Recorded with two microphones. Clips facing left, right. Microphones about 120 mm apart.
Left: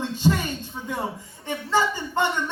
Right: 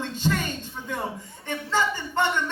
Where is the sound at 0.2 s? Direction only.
15° left (ahead or behind).